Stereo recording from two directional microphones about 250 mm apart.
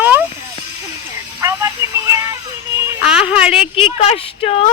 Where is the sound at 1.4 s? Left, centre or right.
Centre.